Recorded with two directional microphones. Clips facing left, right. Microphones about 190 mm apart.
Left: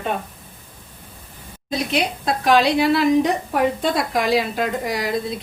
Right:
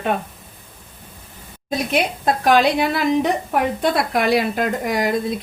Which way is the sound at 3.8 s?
60° right (ahead or behind).